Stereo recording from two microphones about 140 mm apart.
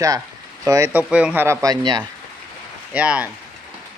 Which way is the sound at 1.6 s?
30° right (ahead or behind).